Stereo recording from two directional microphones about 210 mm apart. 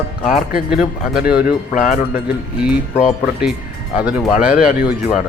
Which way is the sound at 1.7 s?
40° left (ahead or behind).